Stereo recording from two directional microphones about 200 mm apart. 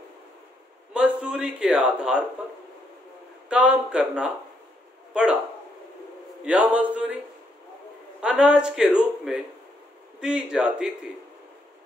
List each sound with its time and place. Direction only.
0.9 s a man's voice: 5° right (ahead or behind)
3.4 s a man's voice: 5° right (ahead or behind)
6.4 s a sound: 5° right (ahead or behind)
8.2 s a man's voice: 5° right (ahead or behind)